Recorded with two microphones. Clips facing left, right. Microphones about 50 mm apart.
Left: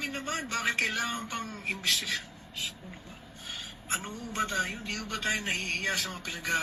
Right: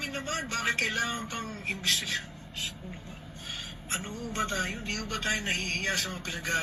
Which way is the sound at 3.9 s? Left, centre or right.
Centre.